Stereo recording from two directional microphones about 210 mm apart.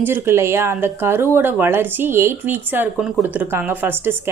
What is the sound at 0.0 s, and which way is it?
Speech, 10° right (ahead or behind).